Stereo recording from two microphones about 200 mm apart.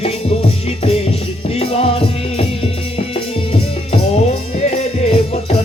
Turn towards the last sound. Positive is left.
turn(degrees=30)  # may be behind; listen again after turning